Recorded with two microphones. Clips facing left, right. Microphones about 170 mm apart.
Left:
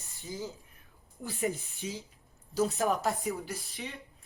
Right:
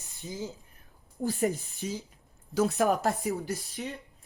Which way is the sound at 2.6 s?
65° right (ahead or behind).